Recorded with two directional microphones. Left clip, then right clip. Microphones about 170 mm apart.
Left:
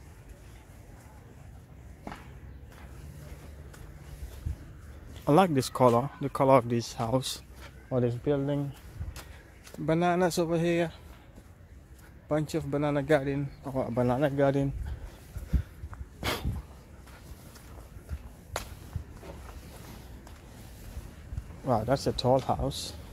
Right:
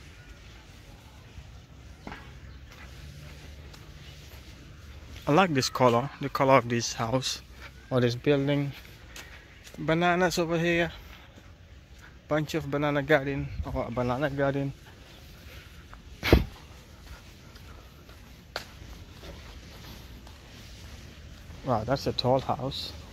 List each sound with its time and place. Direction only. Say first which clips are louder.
5.2 s a man's voice: even; 15° left (ahead or behind)
7.9 s speech: right 3 dB; 10° right (ahead or behind)
9.8 s a man's voice: right 2 dB; 10° left (ahead or behind)
12.3 s a man's voice: right 1 dB; 5° left (ahead or behind); by 14.7 s 25° left (ahead or behind)
16.2 s dog: right 8 dB; 20° left (ahead or behind)
21.6 s a man's voice: even; 15° left (ahead or behind)